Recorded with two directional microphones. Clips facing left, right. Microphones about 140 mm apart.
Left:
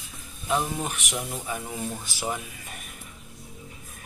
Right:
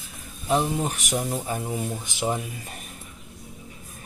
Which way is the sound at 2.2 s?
35° right (ahead or behind).